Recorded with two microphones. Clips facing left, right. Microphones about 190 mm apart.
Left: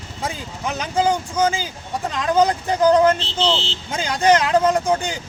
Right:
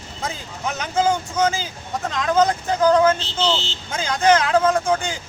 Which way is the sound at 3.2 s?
30° left (ahead or behind).